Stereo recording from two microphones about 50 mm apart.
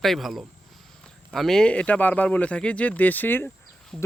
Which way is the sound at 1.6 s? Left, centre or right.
Left.